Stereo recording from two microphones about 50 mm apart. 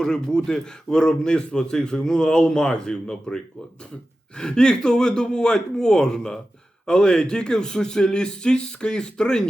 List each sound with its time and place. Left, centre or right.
0.0 s a man's voice: centre